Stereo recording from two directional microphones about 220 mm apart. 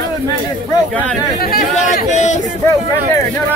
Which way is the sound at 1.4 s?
40° left (ahead or behind).